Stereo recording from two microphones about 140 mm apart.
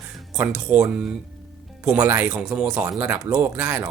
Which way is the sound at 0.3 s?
10° right (ahead or behind).